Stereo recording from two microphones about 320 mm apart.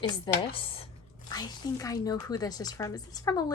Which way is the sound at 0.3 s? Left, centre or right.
Centre.